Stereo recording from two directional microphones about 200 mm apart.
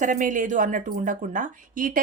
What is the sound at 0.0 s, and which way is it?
A woman's voice, 40° right (ahead or behind).